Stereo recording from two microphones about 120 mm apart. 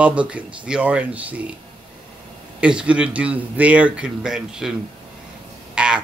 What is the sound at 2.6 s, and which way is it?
A man's voice, 10° right (ahead or behind).